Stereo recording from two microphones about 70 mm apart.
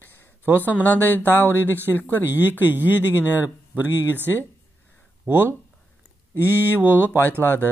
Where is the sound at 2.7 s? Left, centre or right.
Right.